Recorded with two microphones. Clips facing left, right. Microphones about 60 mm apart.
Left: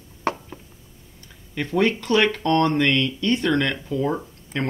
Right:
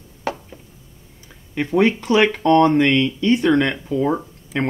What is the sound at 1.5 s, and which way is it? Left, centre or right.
Speech, centre.